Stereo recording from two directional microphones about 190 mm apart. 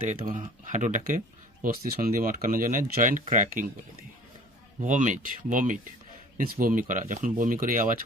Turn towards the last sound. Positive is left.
turn(degrees=-45)  # may be behind; listen again after turning